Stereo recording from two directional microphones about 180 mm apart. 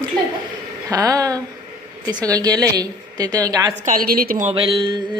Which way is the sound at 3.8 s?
55° right (ahead or behind).